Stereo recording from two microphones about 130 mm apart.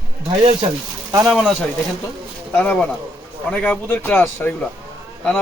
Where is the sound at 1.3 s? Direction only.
Centre (ahead or behind).